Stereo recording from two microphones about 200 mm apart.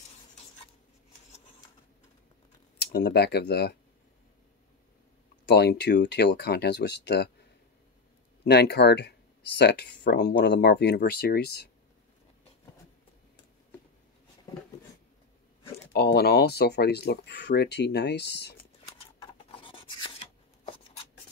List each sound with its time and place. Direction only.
2.8 s speech: 55° left (ahead or behind)
5.5 s speech: 55° left (ahead or behind)
8.5 s speech: 55° left (ahead or behind)
15.9 s speech: 50° left (ahead or behind)
19.5 s a sound: 25° left (ahead or behind)